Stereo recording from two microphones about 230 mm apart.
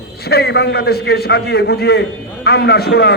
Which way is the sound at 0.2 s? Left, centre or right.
Left.